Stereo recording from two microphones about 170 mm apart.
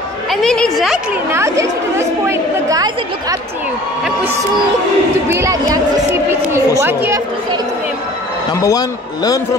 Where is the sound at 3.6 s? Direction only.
10° right (ahead or behind).